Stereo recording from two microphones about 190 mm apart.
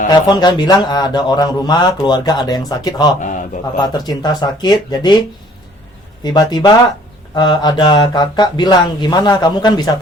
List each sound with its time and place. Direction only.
0.1 s speech: 20° left (ahead or behind)
6.2 s speech: 20° left (ahead or behind)